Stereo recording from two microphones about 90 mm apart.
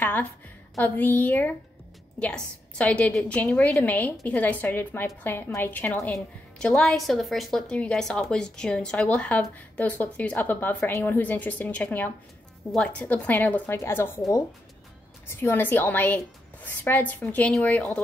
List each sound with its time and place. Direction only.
0.0 s a sound: 20° left (ahead or behind)
0.8 s a woman's voice: 20° left (ahead or behind)
3.3 s a woman's voice: 15° left (ahead or behind)
6.6 s a woman's voice: 5° left (ahead or behind)
13.7 s a woman's voice: 30° left (ahead or behind)
15.2 s a woman's voice: 25° left (ahead or behind)
17.2 s speech: 10° left (ahead or behind)